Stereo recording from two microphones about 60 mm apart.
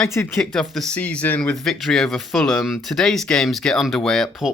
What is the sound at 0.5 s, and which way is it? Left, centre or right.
Speech, centre.